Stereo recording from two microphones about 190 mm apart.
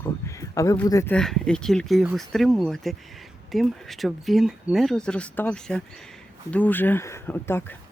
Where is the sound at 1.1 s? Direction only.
5° left (ahead or behind).